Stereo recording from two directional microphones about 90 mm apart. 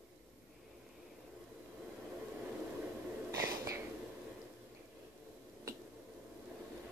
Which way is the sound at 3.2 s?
35° right (ahead or behind).